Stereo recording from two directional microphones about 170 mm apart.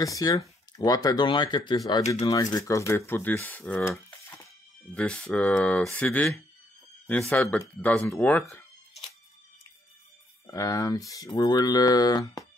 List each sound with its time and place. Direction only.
0.0 s speech: 20° left (ahead or behind)
8.1 s a sound: 10° left (ahead or behind)
10.4 s speech: 20° left (ahead or behind)